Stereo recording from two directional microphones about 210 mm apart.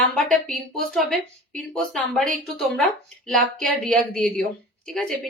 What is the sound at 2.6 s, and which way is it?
A woman's voice, centre (ahead or behind).